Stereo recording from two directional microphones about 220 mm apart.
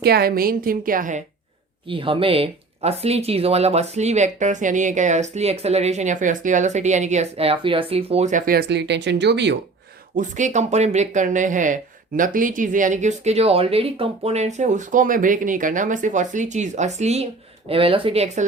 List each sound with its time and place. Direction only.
0.0 s speech: 45° right (ahead or behind)
1.9 s speech: 25° right (ahead or behind); by 9.6 s 50° right (ahead or behind)
10.2 s a woman's voice: 35° right (ahead or behind)